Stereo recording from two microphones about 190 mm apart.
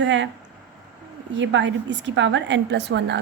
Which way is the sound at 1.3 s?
70° right (ahead or behind).